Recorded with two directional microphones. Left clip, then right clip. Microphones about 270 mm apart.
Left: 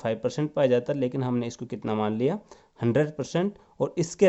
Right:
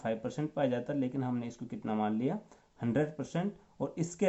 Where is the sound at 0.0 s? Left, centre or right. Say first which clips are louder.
Left 8 dB; left.